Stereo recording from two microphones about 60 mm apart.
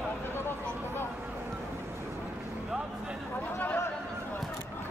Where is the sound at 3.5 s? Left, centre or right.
Left.